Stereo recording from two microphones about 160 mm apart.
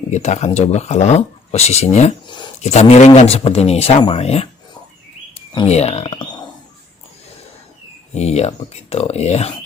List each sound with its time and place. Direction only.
0.1 s speech: 45° left (ahead or behind)
2.2 s a sound: 30° left (ahead or behind)
2.6 s speech: 45° left (ahead or behind)
5.6 s speech: 45° left (ahead or behind)
8.1 s speech: 45° left (ahead or behind)